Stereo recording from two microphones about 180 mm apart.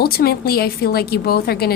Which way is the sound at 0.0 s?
60° left (ahead or behind).